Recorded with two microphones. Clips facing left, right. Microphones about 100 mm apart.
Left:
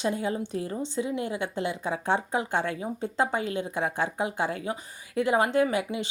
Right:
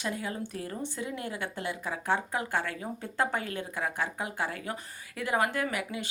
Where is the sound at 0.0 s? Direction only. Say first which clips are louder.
Left 6 dB; 25° left (ahead or behind).